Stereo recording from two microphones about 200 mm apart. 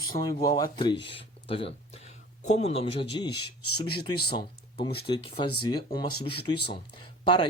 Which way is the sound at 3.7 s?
50° left (ahead or behind).